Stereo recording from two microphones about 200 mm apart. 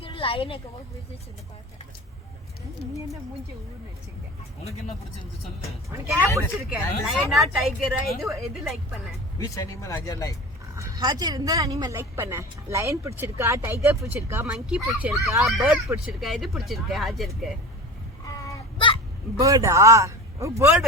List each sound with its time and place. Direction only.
0.0 s a sound: 25° left (ahead or behind)
6.3 s speech: 5° right (ahead or behind)
9.4 s speech: 15° left (ahead or behind)
10.8 s speech: 15° right (ahead or behind); by 17.5 s centre (ahead or behind)
18.4 s baby cry: 25° left (ahead or behind)
19.4 s speech: 15° right (ahead or behind)